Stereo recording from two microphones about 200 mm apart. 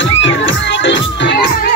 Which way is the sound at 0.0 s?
65° left (ahead or behind).